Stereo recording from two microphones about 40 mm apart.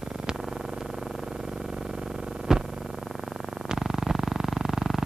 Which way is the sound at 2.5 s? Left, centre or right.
Centre.